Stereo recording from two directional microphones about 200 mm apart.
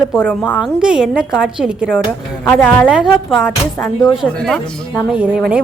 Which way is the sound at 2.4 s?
5° left (ahead or behind).